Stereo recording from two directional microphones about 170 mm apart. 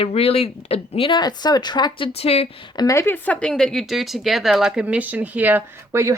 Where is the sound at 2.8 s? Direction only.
15° left (ahead or behind); by 6.1 s 15° right (ahead or behind).